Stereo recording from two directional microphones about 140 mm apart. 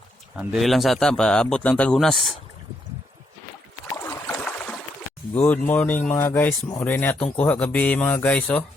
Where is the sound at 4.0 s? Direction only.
10° left (ahead or behind).